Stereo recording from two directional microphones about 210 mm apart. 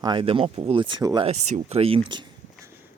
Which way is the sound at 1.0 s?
15° right (ahead or behind).